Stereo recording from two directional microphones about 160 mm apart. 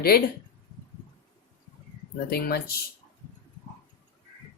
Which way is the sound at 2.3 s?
75° left (ahead or behind).